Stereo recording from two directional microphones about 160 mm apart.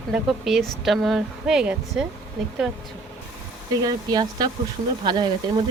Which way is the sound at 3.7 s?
25° right (ahead or behind).